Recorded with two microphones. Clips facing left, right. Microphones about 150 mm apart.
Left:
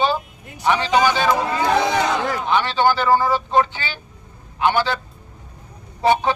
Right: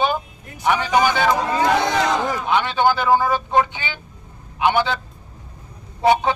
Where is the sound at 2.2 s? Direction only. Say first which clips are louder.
Even; 15° right (ahead or behind).